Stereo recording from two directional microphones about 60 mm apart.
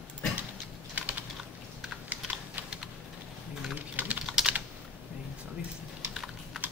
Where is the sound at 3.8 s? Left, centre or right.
Right.